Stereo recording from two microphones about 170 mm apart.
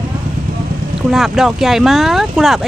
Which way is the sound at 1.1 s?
Centre (ahead or behind).